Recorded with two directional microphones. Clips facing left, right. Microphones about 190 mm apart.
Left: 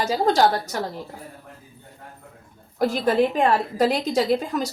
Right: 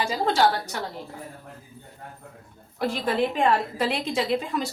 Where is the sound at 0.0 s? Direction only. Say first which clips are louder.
Left 3 dB; 40° left (ahead or behind).